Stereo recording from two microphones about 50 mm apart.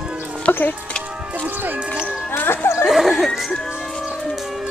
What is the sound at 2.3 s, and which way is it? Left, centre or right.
Speech, left.